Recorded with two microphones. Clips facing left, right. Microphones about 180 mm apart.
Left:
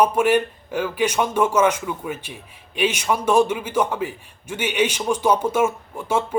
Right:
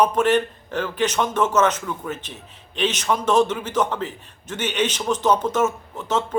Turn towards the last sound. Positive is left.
turn(degrees=10)  # may be behind; listen again after turning